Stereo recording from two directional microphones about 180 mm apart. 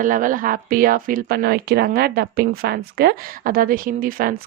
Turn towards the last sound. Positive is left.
turn(degrees=-50)  # may be behind; listen again after turning